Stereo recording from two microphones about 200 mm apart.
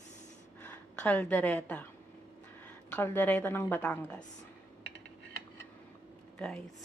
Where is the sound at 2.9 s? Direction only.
10° left (ahead or behind).